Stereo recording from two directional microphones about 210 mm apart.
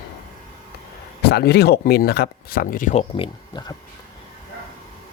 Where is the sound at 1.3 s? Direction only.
50° left (ahead or behind); by 3.7 s 20° left (ahead or behind).